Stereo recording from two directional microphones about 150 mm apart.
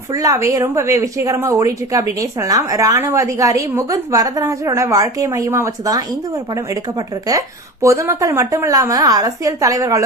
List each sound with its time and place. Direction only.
0.1 s a woman's voice: 25° right (ahead or behind)
7.3 s a woman's voice: 20° right (ahead or behind)